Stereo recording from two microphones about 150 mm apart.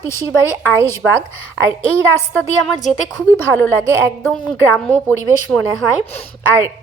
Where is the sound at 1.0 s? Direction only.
5° left (ahead or behind).